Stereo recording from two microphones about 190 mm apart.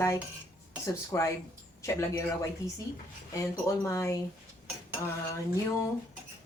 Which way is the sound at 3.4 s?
15° left (ahead or behind).